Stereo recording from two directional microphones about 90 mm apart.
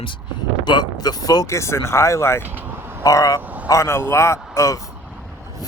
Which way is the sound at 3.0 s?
40° left (ahead or behind).